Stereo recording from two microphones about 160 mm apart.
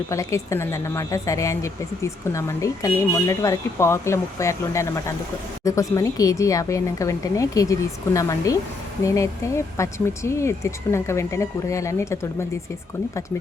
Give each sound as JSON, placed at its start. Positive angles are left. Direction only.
{"t": 0.1, "sound": "speech", "side_deg": 20}